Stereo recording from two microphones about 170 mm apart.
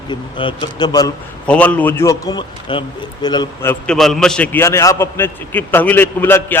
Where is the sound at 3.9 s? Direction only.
Centre (ahead or behind).